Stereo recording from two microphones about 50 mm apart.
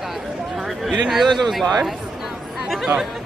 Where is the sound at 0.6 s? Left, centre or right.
Centre.